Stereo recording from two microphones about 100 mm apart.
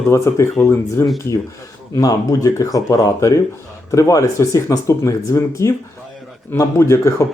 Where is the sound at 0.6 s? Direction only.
20° left (ahead or behind).